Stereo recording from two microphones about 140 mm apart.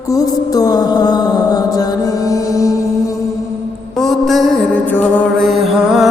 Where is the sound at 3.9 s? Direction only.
Centre (ahead or behind).